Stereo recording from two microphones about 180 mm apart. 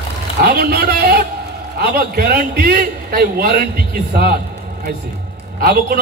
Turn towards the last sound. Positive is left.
turn(degrees=-55)  # may be behind; listen again after turning